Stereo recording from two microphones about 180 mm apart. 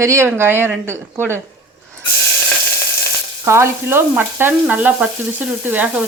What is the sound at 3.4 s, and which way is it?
Frying, 15° right (ahead or behind).